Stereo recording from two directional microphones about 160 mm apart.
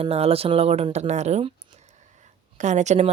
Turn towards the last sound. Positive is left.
turn(degrees=-45)  # may be behind; listen again after turning